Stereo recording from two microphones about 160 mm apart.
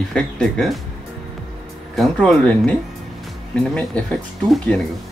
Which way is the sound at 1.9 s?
Centre (ahead or behind).